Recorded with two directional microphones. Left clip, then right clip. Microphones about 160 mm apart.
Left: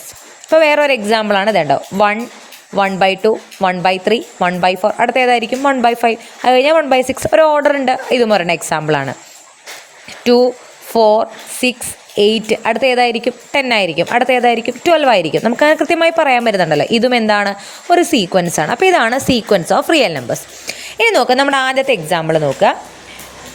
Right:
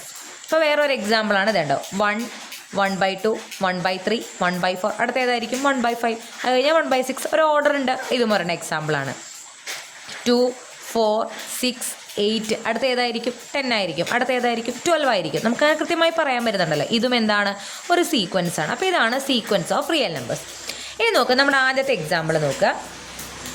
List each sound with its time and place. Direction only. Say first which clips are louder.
0.5 s a woman's voice: left 8 dB; 35° left (ahead or behind)
10.2 s a woman's voice: left 9 dB; 30° left (ahead or behind)